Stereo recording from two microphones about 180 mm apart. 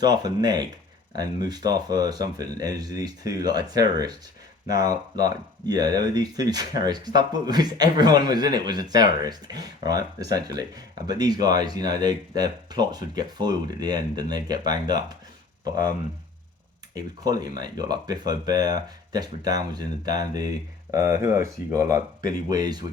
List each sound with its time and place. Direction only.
0.0 s speech: 20° right (ahead or behind)
16.9 s speech: 20° right (ahead or behind)